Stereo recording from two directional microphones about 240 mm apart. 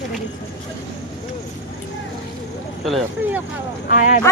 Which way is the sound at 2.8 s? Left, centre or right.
Centre.